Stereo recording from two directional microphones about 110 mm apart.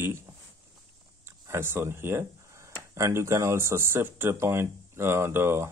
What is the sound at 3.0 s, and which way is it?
Speech, 25° right (ahead or behind).